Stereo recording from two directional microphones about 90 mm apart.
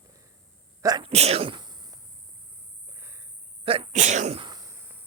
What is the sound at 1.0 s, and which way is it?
Sneeze, 80° right.